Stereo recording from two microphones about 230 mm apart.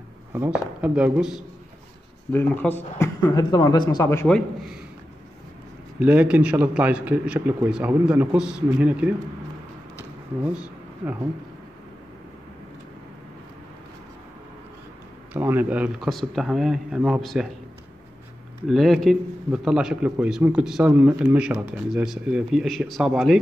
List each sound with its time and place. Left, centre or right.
0.3 s a man's voice: centre
2.3 s speech: centre
5.9 s a man's voice: centre
15.3 s a man's voice: centre
18.7 s a man's voice: centre